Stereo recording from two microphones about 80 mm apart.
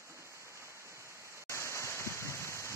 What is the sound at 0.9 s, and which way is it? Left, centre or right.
Waterfall, right.